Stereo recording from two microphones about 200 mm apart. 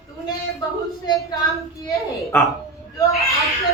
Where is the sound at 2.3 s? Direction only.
10° left (ahead or behind).